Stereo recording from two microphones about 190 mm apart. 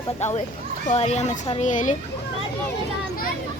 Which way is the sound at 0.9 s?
35° left (ahead or behind).